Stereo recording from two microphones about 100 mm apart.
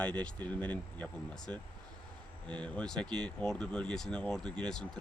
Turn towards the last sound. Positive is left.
turn(degrees=10)  # may be behind; listen again after turning